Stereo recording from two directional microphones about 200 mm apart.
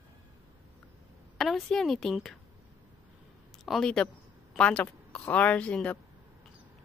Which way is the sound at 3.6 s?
Centre (ahead or behind).